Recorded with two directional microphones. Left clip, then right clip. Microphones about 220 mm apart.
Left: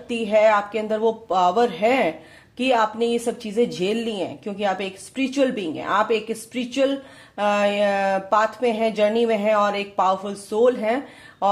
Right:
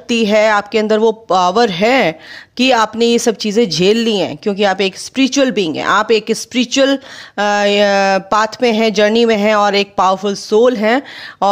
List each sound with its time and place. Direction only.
0.1 s speech: 45° right (ahead or behind)